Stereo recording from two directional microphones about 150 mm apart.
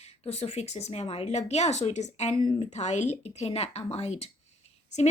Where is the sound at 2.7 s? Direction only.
50° left (ahead or behind).